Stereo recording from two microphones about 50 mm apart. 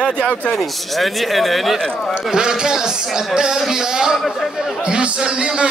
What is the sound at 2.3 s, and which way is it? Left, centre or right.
A man's voice, centre.